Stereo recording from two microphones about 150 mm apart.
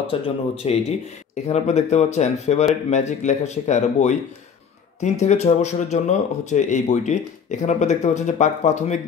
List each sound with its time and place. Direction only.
0.1 s speech: 40° left (ahead or behind)